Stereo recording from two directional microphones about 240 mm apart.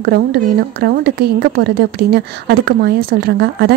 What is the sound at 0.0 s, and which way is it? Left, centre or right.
Speech, right.